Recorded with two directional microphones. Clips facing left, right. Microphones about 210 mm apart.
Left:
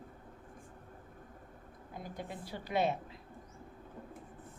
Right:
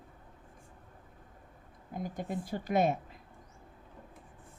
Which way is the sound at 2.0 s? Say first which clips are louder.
Right 7 dB; 45° right (ahead or behind).